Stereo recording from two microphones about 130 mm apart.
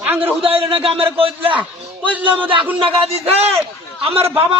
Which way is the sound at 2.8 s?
50° right (ahead or behind).